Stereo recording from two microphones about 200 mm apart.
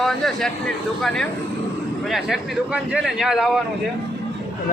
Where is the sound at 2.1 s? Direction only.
Centre (ahead or behind).